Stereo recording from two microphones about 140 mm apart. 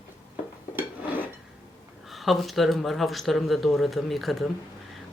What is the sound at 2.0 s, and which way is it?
Speech, centre (ahead or behind).